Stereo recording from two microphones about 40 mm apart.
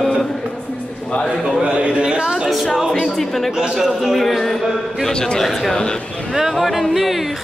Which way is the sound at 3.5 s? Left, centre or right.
Centre.